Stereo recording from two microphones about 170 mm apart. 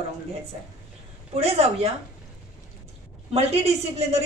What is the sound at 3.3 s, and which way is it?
Speech, 40° right (ahead or behind).